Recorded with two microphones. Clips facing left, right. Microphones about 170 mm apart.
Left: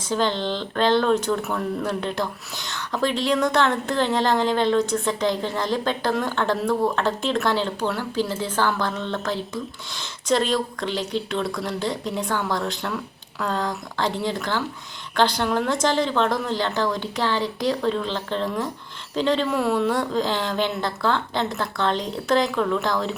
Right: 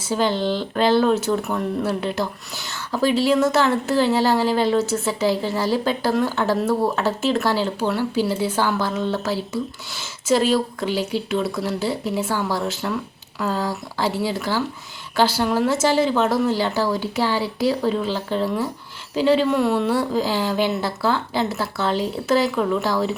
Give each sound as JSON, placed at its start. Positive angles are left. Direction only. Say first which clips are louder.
{"t": 0.0, "sound": "a woman's voice", "louder": "right 2 dB", "side_deg": -10}